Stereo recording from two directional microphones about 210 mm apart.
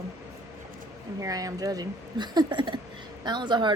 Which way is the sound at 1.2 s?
15° right (ahead or behind).